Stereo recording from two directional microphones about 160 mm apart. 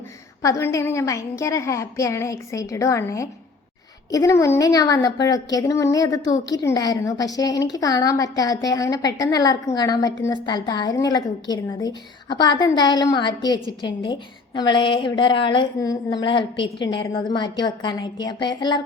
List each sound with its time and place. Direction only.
0.4 s a woman's voice: 20° left (ahead or behind)